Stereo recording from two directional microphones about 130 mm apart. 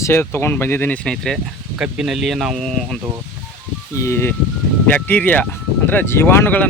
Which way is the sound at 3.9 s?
20° left (ahead or behind).